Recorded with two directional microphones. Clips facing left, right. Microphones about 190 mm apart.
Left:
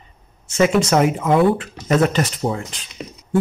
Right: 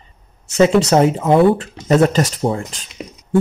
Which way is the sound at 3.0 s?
10° right (ahead or behind).